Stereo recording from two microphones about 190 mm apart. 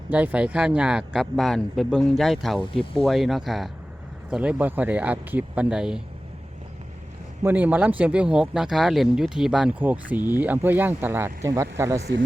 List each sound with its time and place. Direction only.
0.1 s speech: 10° right (ahead or behind)
2.7 s speech: 30° left (ahead or behind)
3.0 s speech: centre (ahead or behind)
7.4 s speech: 10° right (ahead or behind)